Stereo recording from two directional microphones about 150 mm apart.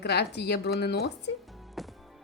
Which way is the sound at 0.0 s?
90° left.